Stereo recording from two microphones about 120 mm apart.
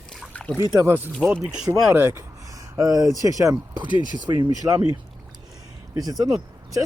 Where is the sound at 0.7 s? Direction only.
20° right (ahead or behind).